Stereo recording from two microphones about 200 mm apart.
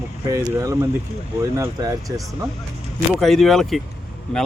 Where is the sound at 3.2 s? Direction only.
Centre (ahead or behind).